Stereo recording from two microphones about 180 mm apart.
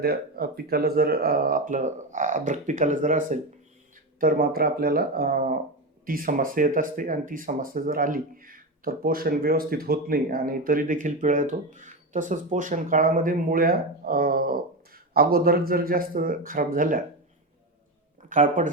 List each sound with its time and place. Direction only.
0.0 s speech: 60° right (ahead or behind)
4.2 s speech: 55° right (ahead or behind)
18.2 s a sound: 45° right (ahead or behind)